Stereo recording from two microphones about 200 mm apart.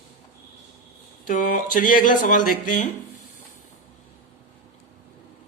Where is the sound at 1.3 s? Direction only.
40° left (ahead or behind).